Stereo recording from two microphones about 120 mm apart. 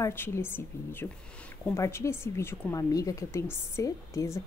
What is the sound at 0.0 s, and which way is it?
Speech, 20° left (ahead or behind).